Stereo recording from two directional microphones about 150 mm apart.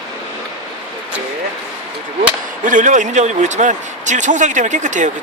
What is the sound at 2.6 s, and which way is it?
A man's voice, 55° right (ahead or behind).